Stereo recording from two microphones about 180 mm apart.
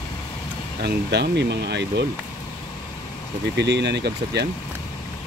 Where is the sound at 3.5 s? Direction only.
70° right (ahead or behind).